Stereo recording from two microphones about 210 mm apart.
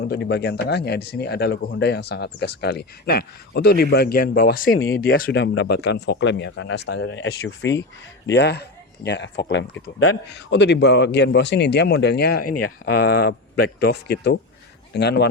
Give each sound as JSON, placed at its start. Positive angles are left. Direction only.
{"t": 0.0, "sound": "speech", "side_deg": 55}
{"t": 10.3, "sound": "speech", "side_deg": 55}